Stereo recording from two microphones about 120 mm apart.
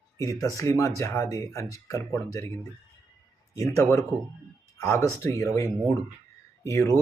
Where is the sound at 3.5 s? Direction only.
25° left (ahead or behind).